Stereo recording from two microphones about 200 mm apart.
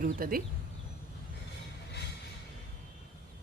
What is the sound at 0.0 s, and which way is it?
Speech, 45° right (ahead or behind).